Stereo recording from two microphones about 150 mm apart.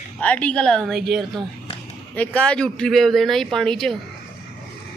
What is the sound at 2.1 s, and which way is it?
Speech, 10° left (ahead or behind).